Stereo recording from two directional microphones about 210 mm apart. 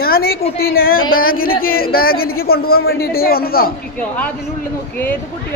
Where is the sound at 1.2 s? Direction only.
45° left (ahead or behind).